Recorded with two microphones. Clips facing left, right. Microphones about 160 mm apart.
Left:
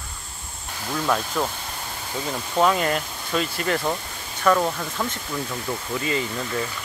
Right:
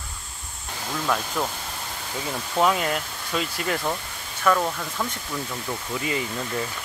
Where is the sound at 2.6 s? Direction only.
5° right (ahead or behind).